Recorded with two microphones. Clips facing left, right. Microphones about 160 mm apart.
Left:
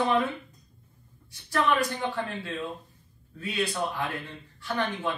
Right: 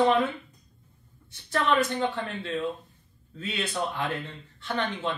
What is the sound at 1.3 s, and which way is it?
Speech, 25° right (ahead or behind).